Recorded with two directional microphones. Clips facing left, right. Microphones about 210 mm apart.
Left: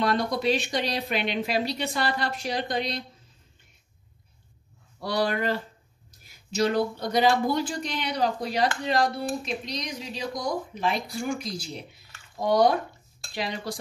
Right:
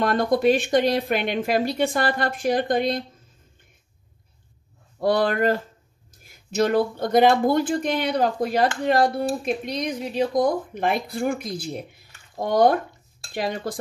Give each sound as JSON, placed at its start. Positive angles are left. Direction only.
{"t": 0.0, "sound": "speech", "side_deg": -50}
{"t": 5.0, "sound": "speech", "side_deg": -50}